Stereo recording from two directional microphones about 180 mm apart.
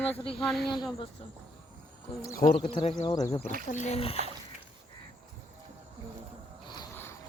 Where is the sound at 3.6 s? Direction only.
40° left (ahead or behind).